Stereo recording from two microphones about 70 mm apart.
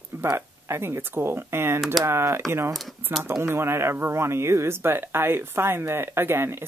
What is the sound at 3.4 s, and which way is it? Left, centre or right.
A woman's voice, right.